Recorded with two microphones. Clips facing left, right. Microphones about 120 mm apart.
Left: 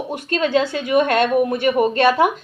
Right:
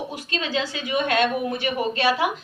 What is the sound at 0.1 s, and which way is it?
Speech, 50° left (ahead or behind).